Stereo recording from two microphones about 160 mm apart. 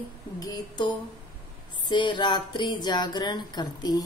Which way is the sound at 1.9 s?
30° left (ahead or behind).